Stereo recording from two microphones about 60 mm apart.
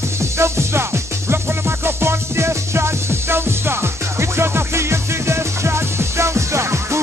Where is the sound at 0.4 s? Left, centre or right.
Right.